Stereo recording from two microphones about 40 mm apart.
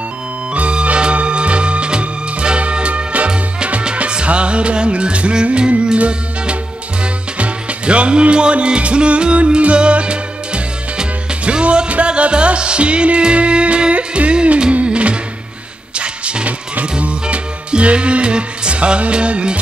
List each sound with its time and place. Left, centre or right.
0.6 s music: right
3.3 s music: right